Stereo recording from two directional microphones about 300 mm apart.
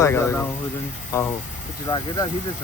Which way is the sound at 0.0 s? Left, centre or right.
Centre.